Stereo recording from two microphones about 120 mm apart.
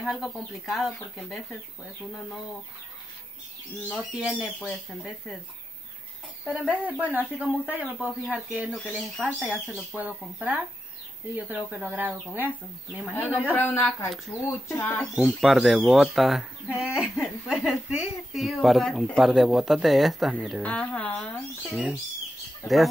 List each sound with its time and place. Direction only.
0.1 s speech: centre (ahead or behind)
3.9 s speech: 5° right (ahead or behind)
6.4 s speech: 10° right (ahead or behind)
13.6 s a woman's voice: 15° left (ahead or behind)
15.1 s speech: centre (ahead or behind)
20.6 s a woman's voice: 10° left (ahead or behind)
22.6 s speech: 20° left (ahead or behind)